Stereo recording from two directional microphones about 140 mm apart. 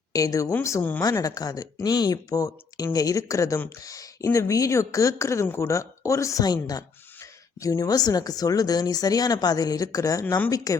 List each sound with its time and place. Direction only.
0.1 s a woman's voice: 25° left (ahead or behind)
1.0 s speech: 25° left (ahead or behind)